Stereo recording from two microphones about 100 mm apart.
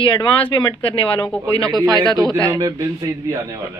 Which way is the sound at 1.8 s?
40° right (ahead or behind).